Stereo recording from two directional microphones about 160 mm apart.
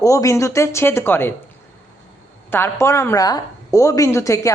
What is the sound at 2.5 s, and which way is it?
Speech, 15° left (ahead or behind).